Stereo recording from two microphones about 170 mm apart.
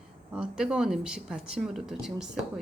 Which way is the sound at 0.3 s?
5° right (ahead or behind).